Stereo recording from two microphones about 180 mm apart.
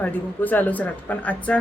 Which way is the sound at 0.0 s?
10° left (ahead or behind).